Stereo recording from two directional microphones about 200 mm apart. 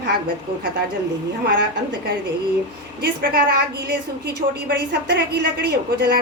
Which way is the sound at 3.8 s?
55° right (ahead or behind).